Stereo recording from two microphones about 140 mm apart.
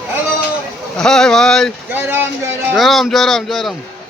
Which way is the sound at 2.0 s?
15° right (ahead or behind).